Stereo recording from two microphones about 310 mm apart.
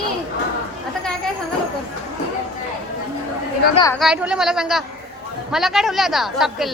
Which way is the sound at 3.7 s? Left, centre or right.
Centre.